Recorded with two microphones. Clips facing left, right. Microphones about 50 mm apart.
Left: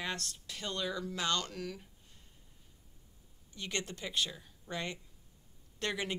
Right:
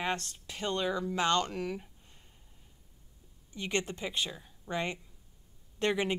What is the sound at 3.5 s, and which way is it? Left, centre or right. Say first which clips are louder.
Speech: right 6 dB; right.